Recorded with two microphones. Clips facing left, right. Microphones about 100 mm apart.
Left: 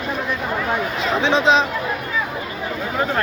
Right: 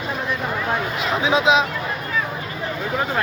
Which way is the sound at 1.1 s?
5° right (ahead or behind).